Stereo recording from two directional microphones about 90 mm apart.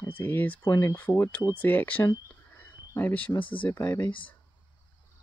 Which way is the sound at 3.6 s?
20° left (ahead or behind).